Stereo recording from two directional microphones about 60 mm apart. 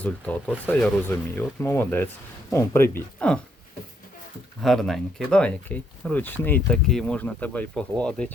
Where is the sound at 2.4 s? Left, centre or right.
Left.